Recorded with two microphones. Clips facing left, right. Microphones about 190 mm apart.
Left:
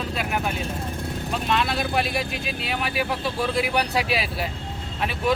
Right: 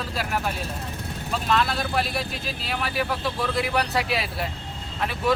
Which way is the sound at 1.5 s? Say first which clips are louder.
Even; 25° left (ahead or behind).